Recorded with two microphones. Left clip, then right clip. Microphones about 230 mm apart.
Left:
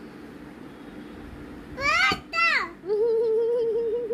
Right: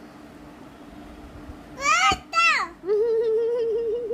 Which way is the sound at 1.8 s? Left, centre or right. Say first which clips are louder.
Right 2 dB; centre.